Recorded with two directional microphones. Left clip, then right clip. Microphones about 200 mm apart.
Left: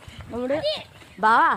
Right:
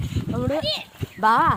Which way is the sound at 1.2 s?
10° right (ahead or behind).